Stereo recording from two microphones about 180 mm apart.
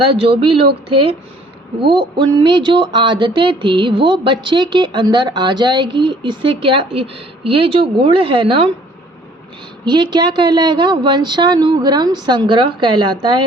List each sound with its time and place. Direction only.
0.0 s a woman's voice: 30° right (ahead or behind)
9.8 s a woman's voice: 25° right (ahead or behind)